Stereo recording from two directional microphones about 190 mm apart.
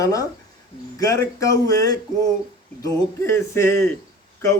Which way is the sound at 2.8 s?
15° left (ahead or behind).